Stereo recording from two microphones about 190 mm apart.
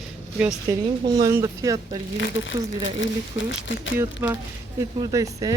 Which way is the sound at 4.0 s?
10° right (ahead or behind).